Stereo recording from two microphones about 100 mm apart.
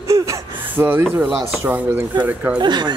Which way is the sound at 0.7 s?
20° right (ahead or behind).